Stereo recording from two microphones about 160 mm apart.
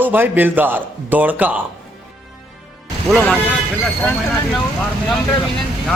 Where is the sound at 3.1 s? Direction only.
5° left (ahead or behind).